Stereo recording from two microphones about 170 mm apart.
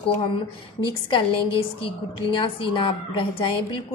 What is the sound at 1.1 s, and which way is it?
A woman's voice, 30° left (ahead or behind).